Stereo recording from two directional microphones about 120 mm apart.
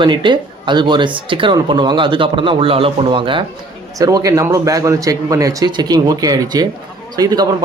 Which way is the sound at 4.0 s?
30° right (ahead or behind).